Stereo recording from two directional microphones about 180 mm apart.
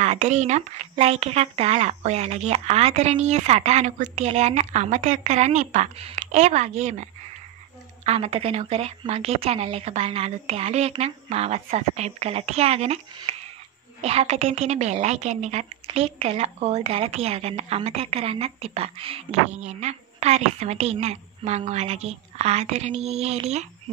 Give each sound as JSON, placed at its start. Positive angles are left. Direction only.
{"t": 0.0, "sound": "a woman's voice", "side_deg": -40}